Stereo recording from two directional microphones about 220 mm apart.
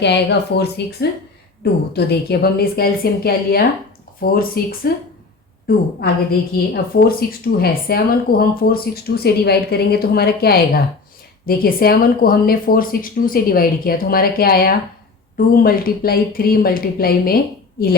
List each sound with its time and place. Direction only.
0.0 s speech: 50° left (ahead or behind)
6.9 s speech: 45° left (ahead or behind)